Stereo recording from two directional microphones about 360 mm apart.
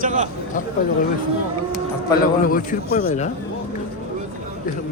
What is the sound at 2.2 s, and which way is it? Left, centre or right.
A man's voice, left.